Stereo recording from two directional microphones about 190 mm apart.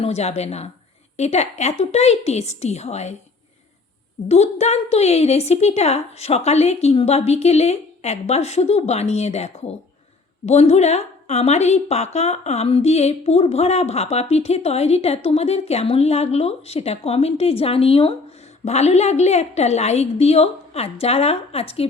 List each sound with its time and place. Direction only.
0.0 s a woman's voice: 35° left (ahead or behind)
4.3 s a woman's voice: 35° left (ahead or behind)